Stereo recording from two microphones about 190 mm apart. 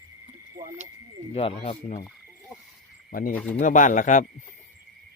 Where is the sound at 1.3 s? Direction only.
30° left (ahead or behind).